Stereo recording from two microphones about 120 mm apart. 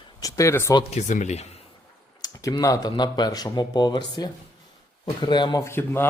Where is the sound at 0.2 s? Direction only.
30° left (ahead or behind).